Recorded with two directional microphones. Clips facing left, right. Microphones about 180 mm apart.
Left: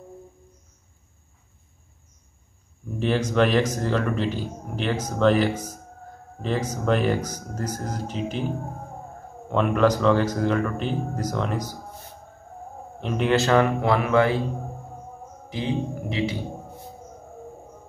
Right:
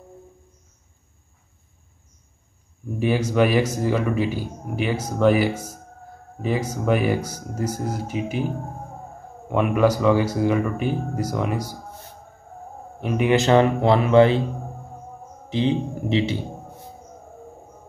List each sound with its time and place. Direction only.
3.0 s a man's voice: 10° right (ahead or behind)
13.0 s a man's voice: 10° right (ahead or behind)
15.5 s a man's voice: 25° right (ahead or behind)